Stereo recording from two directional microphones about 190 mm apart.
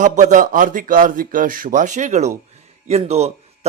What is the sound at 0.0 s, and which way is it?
A man's voice, 40° right (ahead or behind).